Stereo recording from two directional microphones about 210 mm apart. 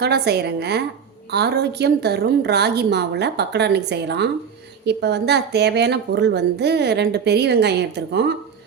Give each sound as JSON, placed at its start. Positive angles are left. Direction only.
{"t": 0.0, "sound": "speech", "side_deg": -50}